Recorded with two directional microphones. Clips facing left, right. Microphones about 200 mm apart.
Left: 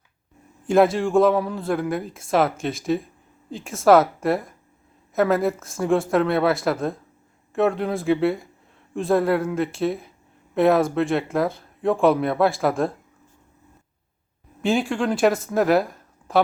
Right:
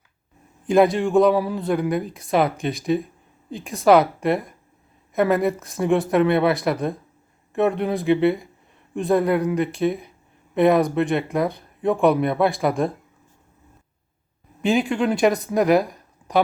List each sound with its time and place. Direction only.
0.7 s speech: centre (ahead or behind)
14.6 s speech: centre (ahead or behind)
15.3 s speech: 15° right (ahead or behind)
15.5 s speech: centre (ahead or behind)